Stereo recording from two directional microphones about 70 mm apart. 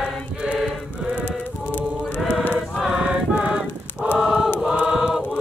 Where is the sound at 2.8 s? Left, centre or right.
Centre.